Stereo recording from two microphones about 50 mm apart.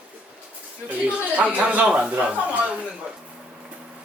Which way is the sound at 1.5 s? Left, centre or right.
Right.